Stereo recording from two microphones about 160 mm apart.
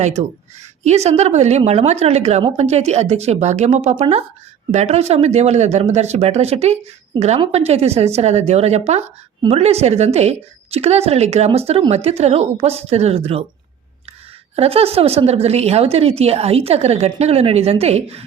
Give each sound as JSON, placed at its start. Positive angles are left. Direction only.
{"t": 0.0, "sound": "a woman's voice", "side_deg": -45}
{"t": 14.5, "sound": "a woman's voice", "side_deg": -40}